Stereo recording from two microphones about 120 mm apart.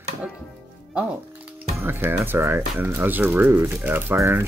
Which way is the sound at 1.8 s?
20° right (ahead or behind).